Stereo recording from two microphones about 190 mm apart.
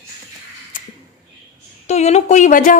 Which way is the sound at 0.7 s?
45° left (ahead or behind).